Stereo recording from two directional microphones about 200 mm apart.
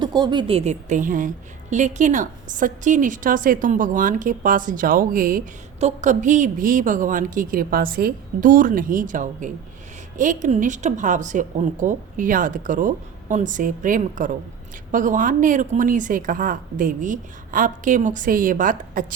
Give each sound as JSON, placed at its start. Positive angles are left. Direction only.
{"t": 0.0, "sound": "a woman's voice", "side_deg": -20}